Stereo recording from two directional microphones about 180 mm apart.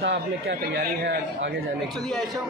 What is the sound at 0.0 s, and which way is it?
Speech, 70° right (ahead or behind).